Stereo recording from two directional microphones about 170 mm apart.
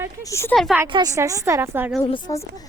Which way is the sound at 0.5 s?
Centre (ahead or behind).